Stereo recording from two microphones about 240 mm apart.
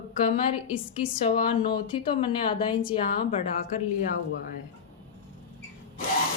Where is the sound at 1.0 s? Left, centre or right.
Left.